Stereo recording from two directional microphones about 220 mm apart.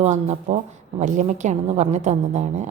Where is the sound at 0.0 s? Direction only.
30° right (ahead or behind).